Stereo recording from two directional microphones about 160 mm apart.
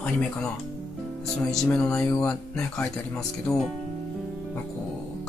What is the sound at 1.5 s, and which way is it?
Speech, 5° left (ahead or behind).